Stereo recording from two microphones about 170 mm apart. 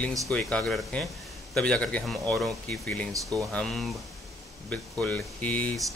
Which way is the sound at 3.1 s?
20° right (ahead or behind).